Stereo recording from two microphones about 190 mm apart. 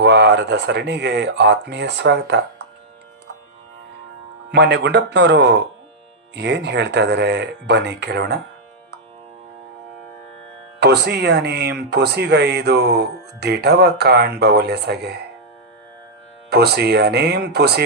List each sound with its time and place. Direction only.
0.0 s speech: 65° right (ahead or behind)
4.5 s speech: 65° right (ahead or behind)
10.8 s speech: 60° right (ahead or behind)
16.5 s speech: 55° right (ahead or behind)